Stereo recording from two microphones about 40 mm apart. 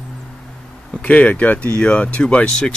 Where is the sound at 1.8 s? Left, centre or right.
Left.